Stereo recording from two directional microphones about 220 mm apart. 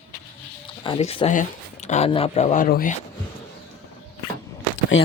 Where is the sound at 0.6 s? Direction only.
20° left (ahead or behind); by 2.9 s 40° left (ahead or behind).